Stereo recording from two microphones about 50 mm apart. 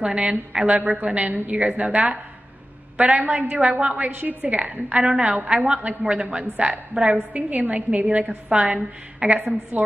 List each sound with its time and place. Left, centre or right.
0.0 s a woman's voice: right
0.7 s a woman's voice: right
6.5 s a woman's voice: right
6.9 s a woman's voice: right